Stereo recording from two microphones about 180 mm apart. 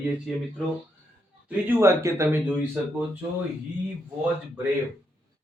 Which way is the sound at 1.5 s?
10° right (ahead or behind).